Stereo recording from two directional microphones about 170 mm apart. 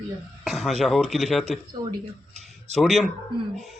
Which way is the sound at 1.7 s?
25° right (ahead or behind).